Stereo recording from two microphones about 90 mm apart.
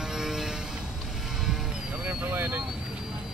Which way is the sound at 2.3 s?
25° right (ahead or behind).